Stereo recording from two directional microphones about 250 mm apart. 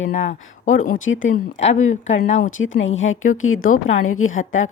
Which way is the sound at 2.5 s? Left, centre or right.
Left.